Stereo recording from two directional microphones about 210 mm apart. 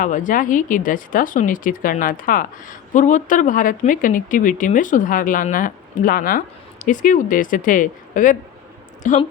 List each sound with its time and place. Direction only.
0.0 s speech: 40° left (ahead or behind)